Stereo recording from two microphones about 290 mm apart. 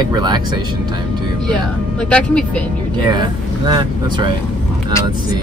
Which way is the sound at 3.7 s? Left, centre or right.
Centre.